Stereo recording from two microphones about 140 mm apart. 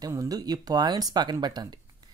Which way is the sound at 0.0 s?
25° right (ahead or behind).